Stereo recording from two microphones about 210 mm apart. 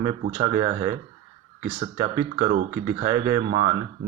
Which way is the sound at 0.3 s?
25° right (ahead or behind).